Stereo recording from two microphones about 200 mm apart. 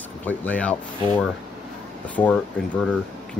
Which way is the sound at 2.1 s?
5° left (ahead or behind).